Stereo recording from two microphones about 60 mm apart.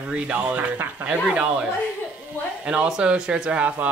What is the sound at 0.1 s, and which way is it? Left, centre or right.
Speech, right.